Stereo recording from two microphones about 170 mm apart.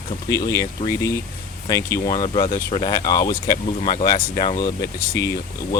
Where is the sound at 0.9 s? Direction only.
15° left (ahead or behind).